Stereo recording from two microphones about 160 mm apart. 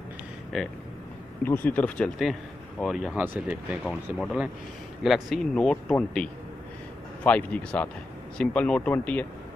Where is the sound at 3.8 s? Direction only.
Centre (ahead or behind).